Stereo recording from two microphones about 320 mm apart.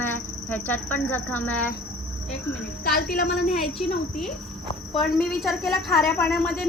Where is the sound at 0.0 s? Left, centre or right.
Centre.